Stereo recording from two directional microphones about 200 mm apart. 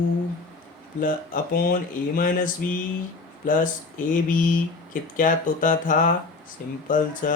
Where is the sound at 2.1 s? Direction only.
45° left (ahead or behind).